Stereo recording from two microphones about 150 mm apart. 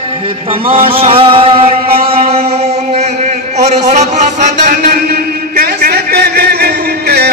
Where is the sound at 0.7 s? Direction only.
40° right (ahead or behind).